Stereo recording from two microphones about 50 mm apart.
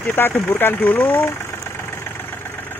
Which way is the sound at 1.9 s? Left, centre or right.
Left.